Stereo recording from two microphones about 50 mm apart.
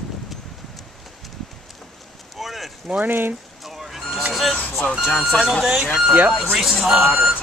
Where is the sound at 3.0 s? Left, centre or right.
Right.